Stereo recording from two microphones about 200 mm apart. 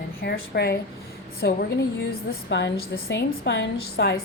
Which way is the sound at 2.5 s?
60° left (ahead or behind).